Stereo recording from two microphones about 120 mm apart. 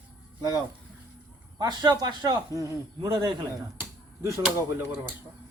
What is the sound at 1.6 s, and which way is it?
Speech, 35° right (ahead or behind).